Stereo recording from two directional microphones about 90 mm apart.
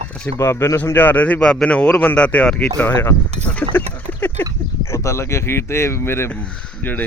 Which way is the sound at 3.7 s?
20° left (ahead or behind).